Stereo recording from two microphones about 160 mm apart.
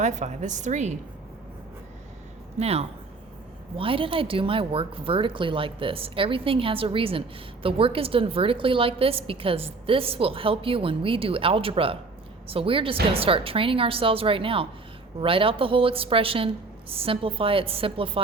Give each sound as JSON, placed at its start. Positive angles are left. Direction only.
{"t": 0.0, "sound": "a woman's voice", "side_deg": -50}
{"t": 2.6, "sound": "a woman's voice", "side_deg": -40}